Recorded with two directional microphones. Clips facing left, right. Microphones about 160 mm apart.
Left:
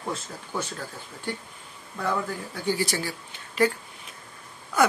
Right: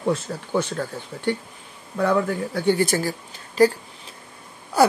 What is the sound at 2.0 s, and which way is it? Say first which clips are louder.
A woman's voice: right 7 dB; 65° right (ahead or behind).